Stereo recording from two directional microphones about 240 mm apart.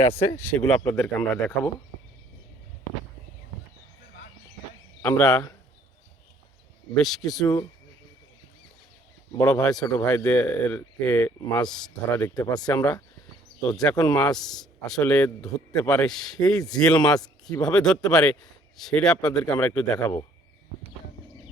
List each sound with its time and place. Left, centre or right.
0.3 s speech: centre
5.0 s a man's voice: centre
6.9 s a man's voice: centre
9.5 s a man's voice: centre
12.2 s speech: centre
12.6 s a man's voice: centre
13.9 s speech: centre
14.2 s a man's voice: centre